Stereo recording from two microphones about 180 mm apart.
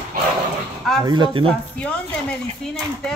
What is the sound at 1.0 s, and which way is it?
Speech, 25° right (ahead or behind).